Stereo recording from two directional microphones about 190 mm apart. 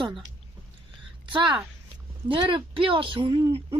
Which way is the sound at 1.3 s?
25° right (ahead or behind).